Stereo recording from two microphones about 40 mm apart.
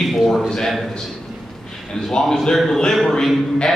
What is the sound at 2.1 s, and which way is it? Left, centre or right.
Speech, centre.